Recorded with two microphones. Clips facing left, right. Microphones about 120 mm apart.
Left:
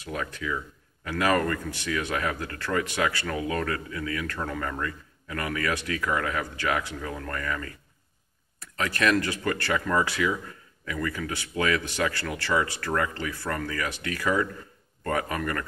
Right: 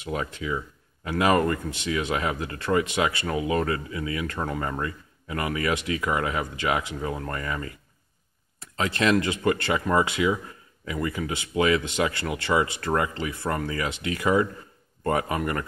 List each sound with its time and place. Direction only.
0.0 s speech: 20° right (ahead or behind)